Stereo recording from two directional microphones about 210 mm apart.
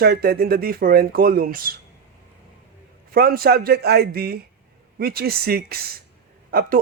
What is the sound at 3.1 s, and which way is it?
A man's voice, 45° right (ahead or behind).